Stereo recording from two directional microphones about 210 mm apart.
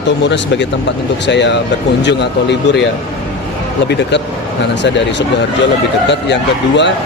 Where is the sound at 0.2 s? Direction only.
55° left (ahead or behind).